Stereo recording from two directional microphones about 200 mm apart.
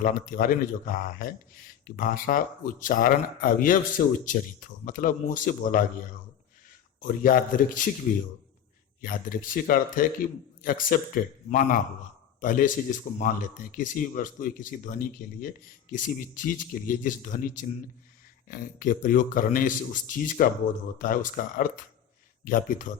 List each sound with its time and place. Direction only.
0.0 s speech: 45° left (ahead or behind)
7.0 s speech: 45° left (ahead or behind)